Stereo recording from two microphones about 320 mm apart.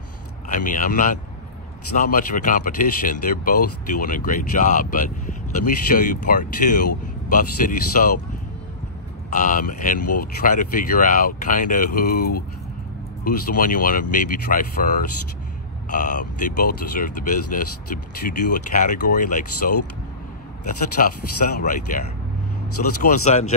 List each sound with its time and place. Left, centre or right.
0.5 s speech: left
9.3 s speech: left
9.9 s speech: left
10.4 s speech: left
21.0 s speech: left
23.0 s speech: left